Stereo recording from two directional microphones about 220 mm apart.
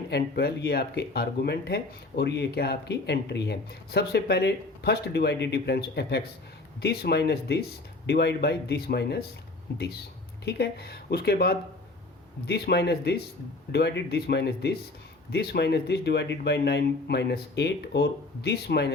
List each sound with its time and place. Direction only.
0.1 s speech: 45° left (ahead or behind)